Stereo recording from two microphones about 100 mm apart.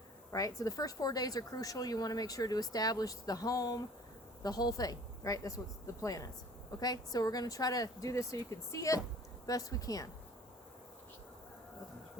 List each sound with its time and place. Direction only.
0.3 s a woman's voice: 35° left (ahead or behind)